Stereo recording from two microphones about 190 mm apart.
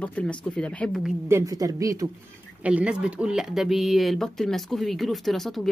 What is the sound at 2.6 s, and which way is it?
Speech, 5° right (ahead or behind).